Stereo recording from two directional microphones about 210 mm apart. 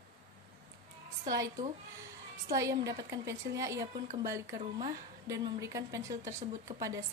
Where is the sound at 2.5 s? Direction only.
15° right (ahead or behind).